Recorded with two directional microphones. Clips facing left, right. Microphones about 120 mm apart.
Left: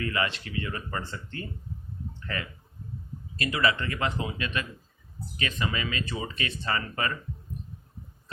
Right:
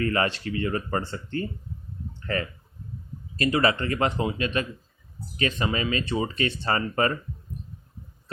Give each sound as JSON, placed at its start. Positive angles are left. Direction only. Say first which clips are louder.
{"t": 0.0, "sound": "speech", "louder": "right 5 dB", "side_deg": -40}